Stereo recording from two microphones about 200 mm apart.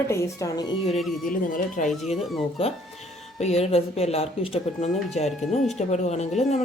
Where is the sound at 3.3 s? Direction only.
35° left (ahead or behind).